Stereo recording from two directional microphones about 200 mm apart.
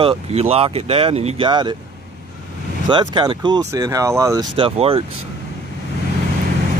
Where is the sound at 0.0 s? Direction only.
30° right (ahead or behind).